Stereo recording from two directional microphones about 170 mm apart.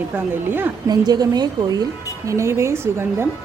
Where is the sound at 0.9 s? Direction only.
25° right (ahead or behind).